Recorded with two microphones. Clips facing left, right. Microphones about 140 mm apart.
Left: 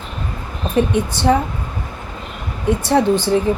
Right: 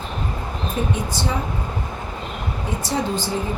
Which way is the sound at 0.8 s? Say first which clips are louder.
Left 8 dB; 65° left (ahead or behind).